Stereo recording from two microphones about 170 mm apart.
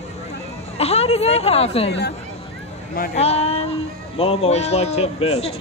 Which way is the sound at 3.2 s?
40° left (ahead or behind).